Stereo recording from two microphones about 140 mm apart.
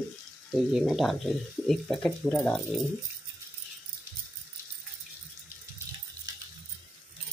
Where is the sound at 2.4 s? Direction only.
15° left (ahead or behind).